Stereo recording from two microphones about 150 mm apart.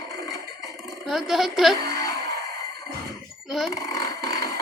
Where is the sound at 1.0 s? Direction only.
Centre (ahead or behind).